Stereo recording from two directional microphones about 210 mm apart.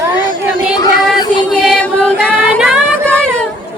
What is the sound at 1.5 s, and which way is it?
Music, 5° left (ahead or behind).